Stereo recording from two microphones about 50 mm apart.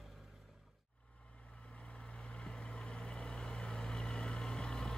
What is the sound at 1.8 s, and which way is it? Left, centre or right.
Vehicle, left.